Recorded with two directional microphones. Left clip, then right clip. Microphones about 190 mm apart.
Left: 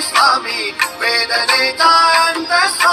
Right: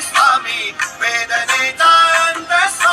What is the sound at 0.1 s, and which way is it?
Music, 30° left (ahead or behind).